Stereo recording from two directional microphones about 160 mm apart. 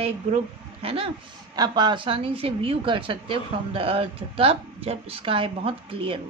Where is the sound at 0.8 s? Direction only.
35° right (ahead or behind).